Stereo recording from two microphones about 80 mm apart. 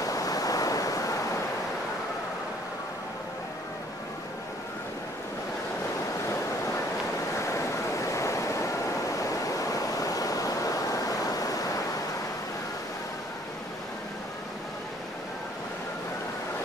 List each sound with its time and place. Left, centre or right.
0.0 s waves: left
7.3 s waves: left
9.2 s pink noise: left